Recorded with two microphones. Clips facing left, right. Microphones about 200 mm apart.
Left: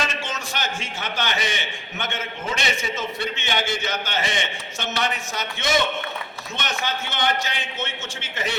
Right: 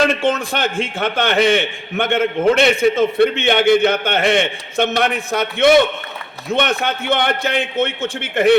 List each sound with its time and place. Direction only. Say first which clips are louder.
0.0 s a man's voice: right 13 dB; 55° right (ahead or behind)